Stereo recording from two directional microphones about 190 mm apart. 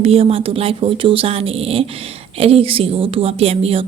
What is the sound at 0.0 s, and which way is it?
A woman's voice, 30° right (ahead or behind).